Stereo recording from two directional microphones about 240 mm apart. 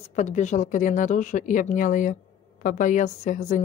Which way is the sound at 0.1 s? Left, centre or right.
Left.